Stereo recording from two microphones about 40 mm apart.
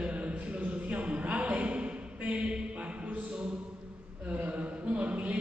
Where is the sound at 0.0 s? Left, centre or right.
Right.